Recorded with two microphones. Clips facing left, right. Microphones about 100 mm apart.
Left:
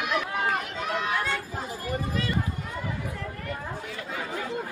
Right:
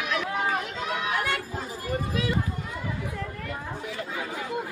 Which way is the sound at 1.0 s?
10° right (ahead or behind).